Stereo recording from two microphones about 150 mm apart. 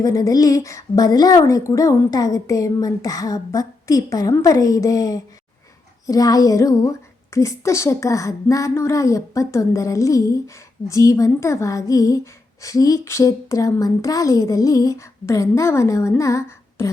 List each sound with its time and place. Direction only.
0.0 s speech: 25° left (ahead or behind)